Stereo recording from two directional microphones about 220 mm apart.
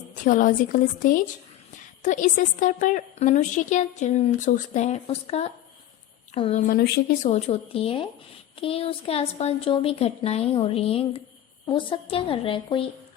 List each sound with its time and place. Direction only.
0.1 s a woman's voice: 35° left (ahead or behind)